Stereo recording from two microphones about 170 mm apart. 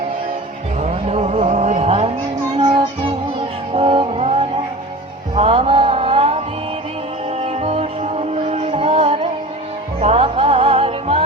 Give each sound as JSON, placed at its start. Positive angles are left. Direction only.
{"t": 0.8, "sound": "vehicle", "side_deg": -40}
{"t": 2.6, "sound": "music", "side_deg": -30}
{"t": 3.8, "sound": "vehicle", "side_deg": -30}
{"t": 5.3, "sound": "music", "side_deg": -35}